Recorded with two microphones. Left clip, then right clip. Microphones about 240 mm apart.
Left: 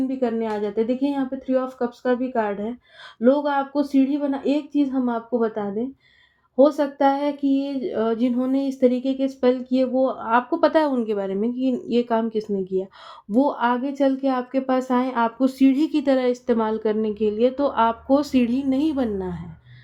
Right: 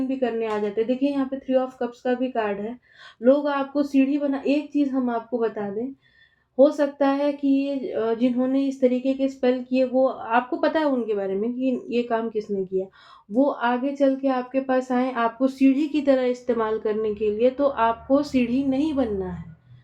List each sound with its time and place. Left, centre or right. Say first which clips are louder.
0.2 s speech: right 1 dB; left
6.6 s speech: left 1 dB; left